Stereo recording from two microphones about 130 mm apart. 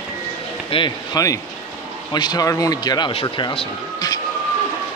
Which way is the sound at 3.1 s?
40° left (ahead or behind).